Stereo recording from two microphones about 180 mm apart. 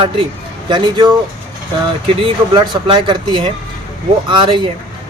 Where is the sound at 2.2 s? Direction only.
30° right (ahead or behind).